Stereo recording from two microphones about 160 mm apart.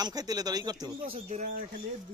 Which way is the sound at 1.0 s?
35° right (ahead or behind).